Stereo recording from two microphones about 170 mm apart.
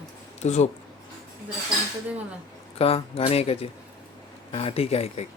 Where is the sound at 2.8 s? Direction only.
35° left (ahead or behind).